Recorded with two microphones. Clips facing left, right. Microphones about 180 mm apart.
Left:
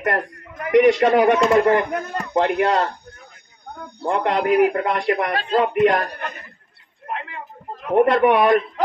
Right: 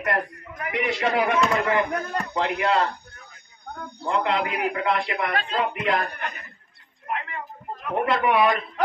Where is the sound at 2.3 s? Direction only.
50° left (ahead or behind).